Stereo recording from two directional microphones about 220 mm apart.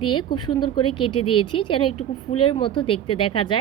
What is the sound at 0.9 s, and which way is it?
Speech, 90° left.